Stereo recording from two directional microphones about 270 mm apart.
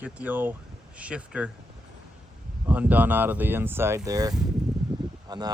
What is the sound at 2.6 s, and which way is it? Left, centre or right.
Speech, centre.